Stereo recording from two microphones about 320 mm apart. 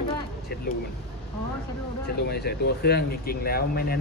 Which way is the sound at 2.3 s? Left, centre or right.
Left.